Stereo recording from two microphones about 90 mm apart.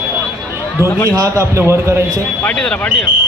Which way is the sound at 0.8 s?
35° left (ahead or behind).